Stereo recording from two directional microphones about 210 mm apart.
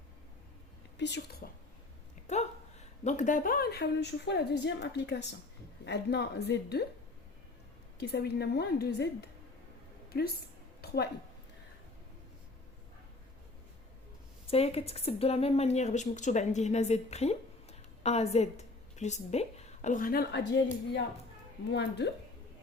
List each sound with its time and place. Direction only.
0.9 s speech: 55° left (ahead or behind)
2.2 s a woman's voice: 30° left (ahead or behind); by 6.8 s 50° left (ahead or behind)
7.9 s a woman's voice: 50° left (ahead or behind)
10.1 s speech: 50° left (ahead or behind)
10.8 s a sound: 50° left (ahead or behind)
14.5 s a woman's voice: 30° left (ahead or behind); by 22.1 s 55° left (ahead or behind)